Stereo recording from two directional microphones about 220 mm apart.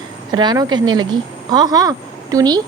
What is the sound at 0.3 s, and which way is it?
A woman's voice, 20° right (ahead or behind).